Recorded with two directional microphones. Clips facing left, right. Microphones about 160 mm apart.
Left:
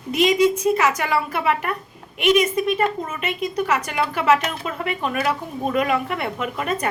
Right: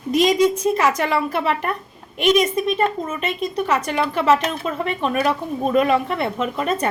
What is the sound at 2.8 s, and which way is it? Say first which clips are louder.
Speech: right 2 dB; 30° right (ahead or behind).